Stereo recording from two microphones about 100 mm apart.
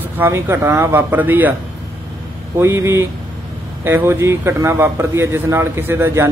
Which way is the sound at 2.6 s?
30° right (ahead or behind).